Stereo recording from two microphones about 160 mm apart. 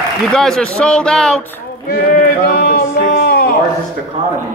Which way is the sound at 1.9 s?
70° left (ahead or behind).